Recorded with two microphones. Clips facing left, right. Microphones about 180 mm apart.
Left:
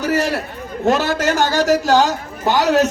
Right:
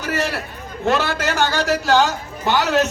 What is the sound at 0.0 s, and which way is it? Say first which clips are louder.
A man's voice: left 5 dB; 40° left (ahead or behind).